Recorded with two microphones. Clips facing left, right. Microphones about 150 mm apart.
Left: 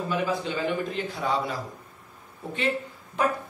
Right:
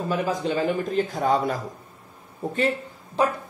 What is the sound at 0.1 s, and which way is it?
A man's voice, 40° right (ahead or behind).